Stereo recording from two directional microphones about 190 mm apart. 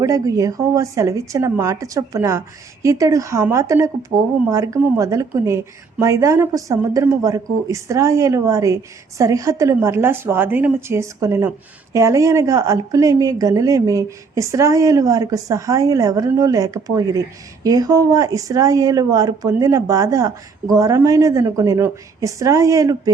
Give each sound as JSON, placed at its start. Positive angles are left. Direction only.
{"t": 0.0, "sound": "speech", "side_deg": -15}